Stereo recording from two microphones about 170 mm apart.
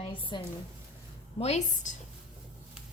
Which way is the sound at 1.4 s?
40° left (ahead or behind).